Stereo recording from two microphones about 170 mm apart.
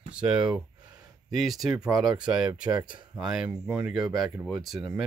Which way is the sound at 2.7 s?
25° right (ahead or behind).